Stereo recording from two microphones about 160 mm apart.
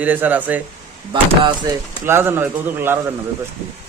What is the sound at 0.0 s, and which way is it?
Speech, 10° right (ahead or behind).